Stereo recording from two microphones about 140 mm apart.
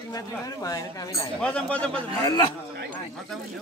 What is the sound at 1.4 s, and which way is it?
Speech, 5° left (ahead or behind).